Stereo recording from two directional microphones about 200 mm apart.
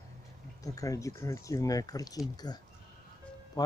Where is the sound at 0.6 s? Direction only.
15° left (ahead or behind).